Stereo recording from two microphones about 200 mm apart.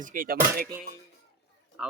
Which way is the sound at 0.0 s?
45° right (ahead or behind).